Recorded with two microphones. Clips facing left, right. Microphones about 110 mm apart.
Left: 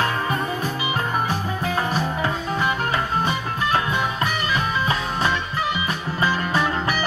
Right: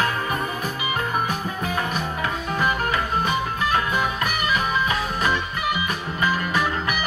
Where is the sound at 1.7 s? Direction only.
35° left (ahead or behind).